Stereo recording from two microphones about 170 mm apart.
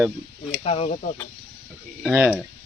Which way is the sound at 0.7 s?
35° left (ahead or behind).